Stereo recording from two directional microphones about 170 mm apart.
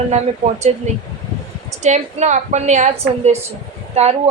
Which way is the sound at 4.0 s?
40° right (ahead or behind).